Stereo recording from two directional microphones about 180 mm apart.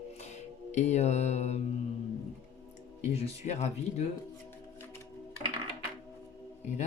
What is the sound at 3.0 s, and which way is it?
Speech, 40° left (ahead or behind).